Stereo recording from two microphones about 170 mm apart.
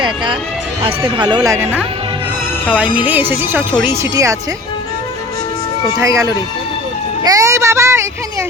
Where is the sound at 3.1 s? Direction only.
10° right (ahead or behind).